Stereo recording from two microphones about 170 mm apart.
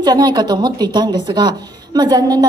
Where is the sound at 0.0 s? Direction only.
25° right (ahead or behind).